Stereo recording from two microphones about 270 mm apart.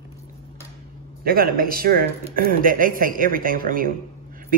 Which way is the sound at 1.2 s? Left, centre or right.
Right.